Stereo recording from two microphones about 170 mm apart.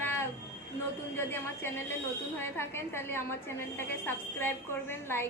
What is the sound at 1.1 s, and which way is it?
A woman's voice, 15° left (ahead or behind).